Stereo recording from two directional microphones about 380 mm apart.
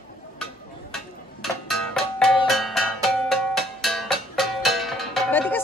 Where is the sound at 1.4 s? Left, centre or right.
Centre.